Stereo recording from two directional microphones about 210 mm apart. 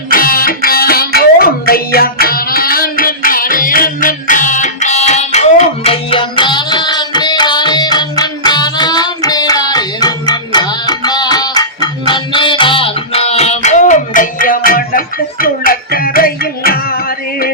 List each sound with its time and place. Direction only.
0.1 s music: 45° left (ahead or behind)